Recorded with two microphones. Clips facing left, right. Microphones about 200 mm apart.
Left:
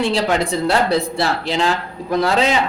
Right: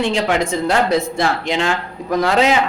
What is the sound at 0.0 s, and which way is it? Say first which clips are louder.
Speech: even; 35° left (ahead or behind).